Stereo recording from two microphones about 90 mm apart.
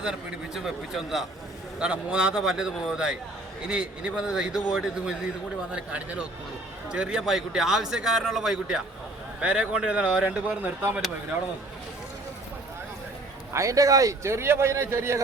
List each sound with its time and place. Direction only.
0.0 s a man's voice: 5° right (ahead or behind)
13.5 s a man's voice: 35° right (ahead or behind)